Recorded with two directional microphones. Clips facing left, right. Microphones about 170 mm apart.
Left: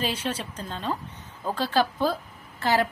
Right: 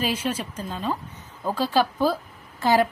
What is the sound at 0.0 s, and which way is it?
A woman's voice, 10° right (ahead or behind).